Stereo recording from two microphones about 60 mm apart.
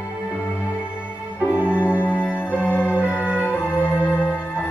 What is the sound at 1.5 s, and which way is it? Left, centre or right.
Music, right.